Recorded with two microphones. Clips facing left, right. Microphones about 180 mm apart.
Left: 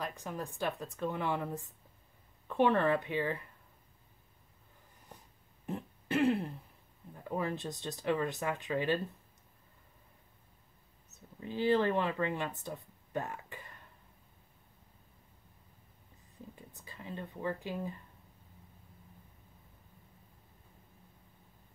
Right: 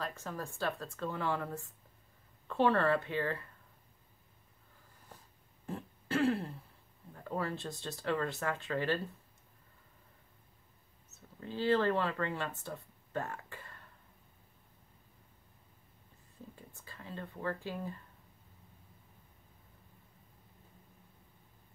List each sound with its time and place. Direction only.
0.0 s speech: 15° left (ahead or behind)
5.7 s throat clearing: 20° left (ahead or behind)
7.2 s speech: 15° left (ahead or behind)
11.1 s speech: 15° left (ahead or behind)
16.5 s speech: 15° left (ahead or behind)